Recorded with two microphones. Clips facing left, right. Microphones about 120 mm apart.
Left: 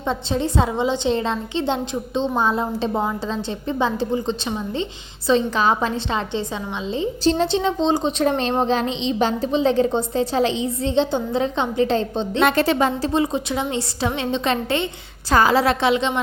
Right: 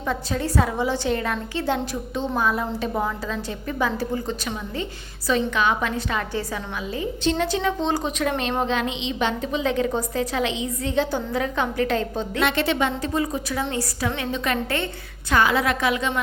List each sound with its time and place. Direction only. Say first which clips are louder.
0.1 s a woman's voice: left 3 dB; 25° left (ahead or behind)
8.2 s a woman's voice: left 4 dB; 30° left (ahead or behind)
12.4 s a woman's voice: left 4 dB; 40° left (ahead or behind); by 14.8 s 25° left (ahead or behind)
15.3 s a woman's voice: left 4 dB; 35° left (ahead or behind)